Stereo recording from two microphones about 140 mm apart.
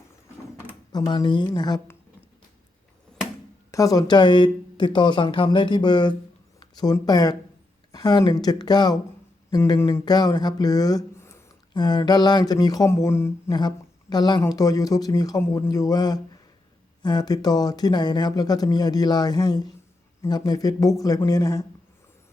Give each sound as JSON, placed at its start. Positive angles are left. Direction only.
{"t": 0.9, "sound": "speech", "side_deg": 30}
{"t": 3.7, "sound": "speech", "side_deg": 25}
{"t": 11.7, "sound": "speech", "side_deg": 30}